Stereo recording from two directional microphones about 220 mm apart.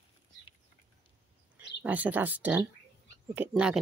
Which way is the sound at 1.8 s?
5° right (ahead or behind).